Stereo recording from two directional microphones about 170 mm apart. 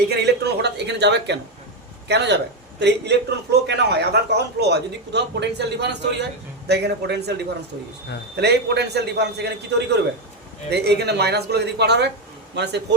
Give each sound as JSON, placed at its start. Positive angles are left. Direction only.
{"t": 0.1, "sound": "a sound", "side_deg": -75}
{"t": 2.0, "sound": "a man's voice", "side_deg": -85}
{"t": 6.7, "sound": "a man's voice", "side_deg": -75}